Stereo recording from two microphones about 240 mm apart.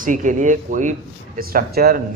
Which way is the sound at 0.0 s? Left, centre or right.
Right.